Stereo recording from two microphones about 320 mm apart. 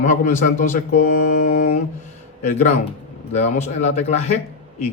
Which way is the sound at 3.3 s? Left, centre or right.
Left.